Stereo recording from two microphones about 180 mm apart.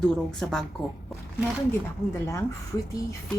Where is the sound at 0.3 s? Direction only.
5° left (ahead or behind).